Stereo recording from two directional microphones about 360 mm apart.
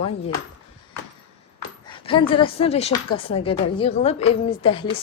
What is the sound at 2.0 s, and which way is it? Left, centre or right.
Speech, centre.